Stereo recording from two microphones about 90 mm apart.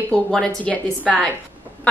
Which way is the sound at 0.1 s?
5° left (ahead or behind).